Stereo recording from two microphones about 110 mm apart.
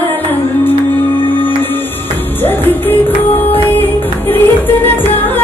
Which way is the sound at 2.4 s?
20° left (ahead or behind).